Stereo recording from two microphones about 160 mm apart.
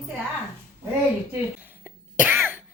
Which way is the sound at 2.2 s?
10° right (ahead or behind).